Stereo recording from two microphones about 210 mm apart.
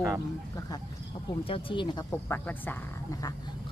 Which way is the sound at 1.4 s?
25° left (ahead or behind).